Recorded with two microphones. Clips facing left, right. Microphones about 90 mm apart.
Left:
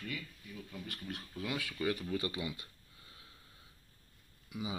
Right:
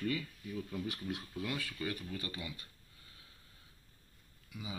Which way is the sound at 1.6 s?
15° left (ahead or behind).